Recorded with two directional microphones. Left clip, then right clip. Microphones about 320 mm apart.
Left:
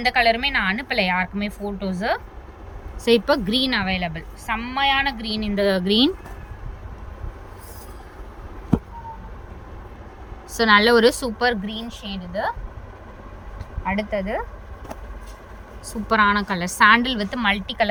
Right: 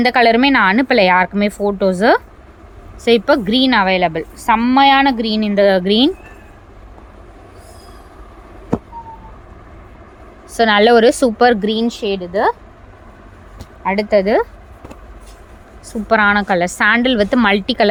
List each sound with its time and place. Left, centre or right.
0.0 s a woman's voice: centre
10.5 s a woman's voice: centre
13.8 s speech: centre
15.9 s a woman's voice: centre